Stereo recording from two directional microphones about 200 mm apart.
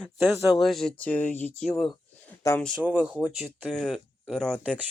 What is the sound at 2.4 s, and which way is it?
Speech, 15° left (ahead or behind).